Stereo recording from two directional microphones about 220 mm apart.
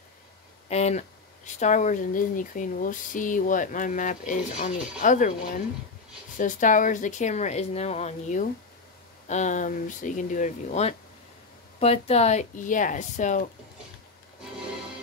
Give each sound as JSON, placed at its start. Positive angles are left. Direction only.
{"t": 0.7, "sound": "speech", "side_deg": 30}